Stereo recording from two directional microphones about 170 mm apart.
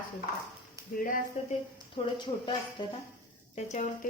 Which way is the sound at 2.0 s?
35° left (ahead or behind).